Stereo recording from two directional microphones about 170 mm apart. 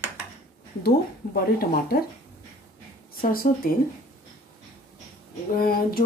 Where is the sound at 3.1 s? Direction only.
60° left (ahead or behind).